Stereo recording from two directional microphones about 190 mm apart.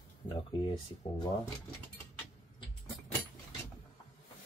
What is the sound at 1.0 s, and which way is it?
Speech, 25° left (ahead or behind).